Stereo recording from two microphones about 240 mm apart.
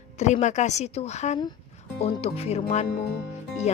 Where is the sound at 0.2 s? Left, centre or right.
Left.